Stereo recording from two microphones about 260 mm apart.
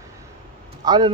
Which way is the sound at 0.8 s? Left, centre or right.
Centre.